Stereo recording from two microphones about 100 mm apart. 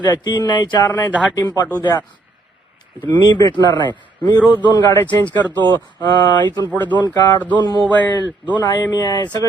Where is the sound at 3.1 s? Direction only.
45° left (ahead or behind).